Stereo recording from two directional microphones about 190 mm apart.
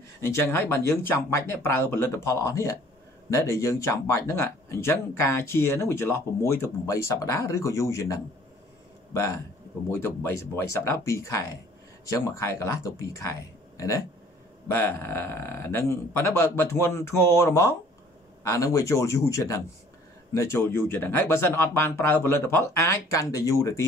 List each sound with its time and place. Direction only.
0.3 s speech: 15° left (ahead or behind)